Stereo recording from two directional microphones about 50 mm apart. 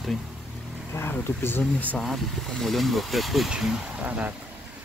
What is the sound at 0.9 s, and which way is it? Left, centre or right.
Speech, left.